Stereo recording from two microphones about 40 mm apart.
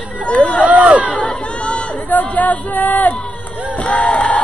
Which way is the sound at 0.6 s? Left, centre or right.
Right.